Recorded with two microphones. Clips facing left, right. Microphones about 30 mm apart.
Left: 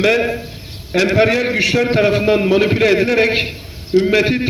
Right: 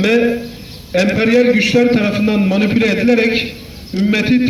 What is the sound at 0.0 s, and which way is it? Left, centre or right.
A man's voice, centre.